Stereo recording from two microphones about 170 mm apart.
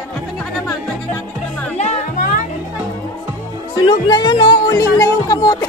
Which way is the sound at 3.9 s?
25° left (ahead or behind).